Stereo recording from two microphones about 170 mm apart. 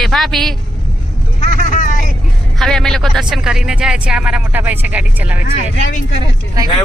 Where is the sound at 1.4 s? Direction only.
45° left (ahead or behind).